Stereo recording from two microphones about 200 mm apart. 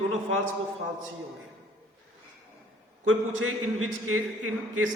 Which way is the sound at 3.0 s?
90° right.